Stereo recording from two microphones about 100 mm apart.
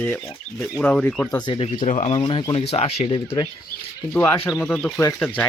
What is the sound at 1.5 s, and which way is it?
Speech, 70° left (ahead or behind).